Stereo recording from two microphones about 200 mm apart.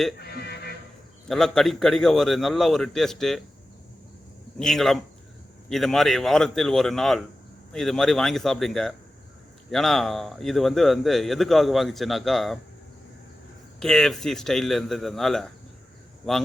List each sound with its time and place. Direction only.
0.2 s a sound: 55° left (ahead or behind)
1.3 s speech: centre (ahead or behind)
4.5 s speech: centre (ahead or behind)
13.7 s speech: 5° left (ahead or behind)